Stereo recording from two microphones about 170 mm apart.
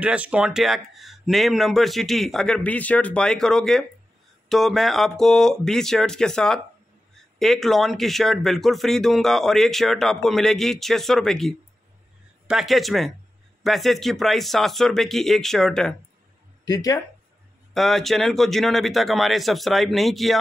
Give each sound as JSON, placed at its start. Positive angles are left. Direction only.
{"t": 0.0, "sound": "speech", "side_deg": -10}
{"t": 16.6, "sound": "speech", "side_deg": 20}
{"t": 17.7, "sound": "speech", "side_deg": 0}